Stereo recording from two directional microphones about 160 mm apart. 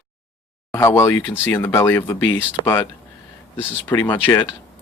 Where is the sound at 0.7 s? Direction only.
15° left (ahead or behind).